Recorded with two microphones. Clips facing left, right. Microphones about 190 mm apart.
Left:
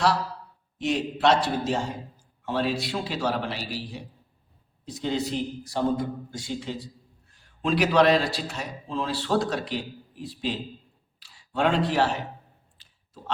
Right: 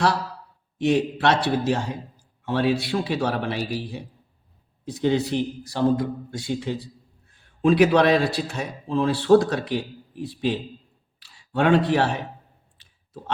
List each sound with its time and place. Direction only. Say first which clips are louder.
0.8 s a man's voice: right 4 dB; 60° right (ahead or behind)
12.7 s clicking: right 8 dB; 55° right (ahead or behind)